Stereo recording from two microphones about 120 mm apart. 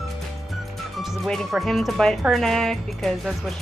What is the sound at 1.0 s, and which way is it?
Speech, centre (ahead or behind).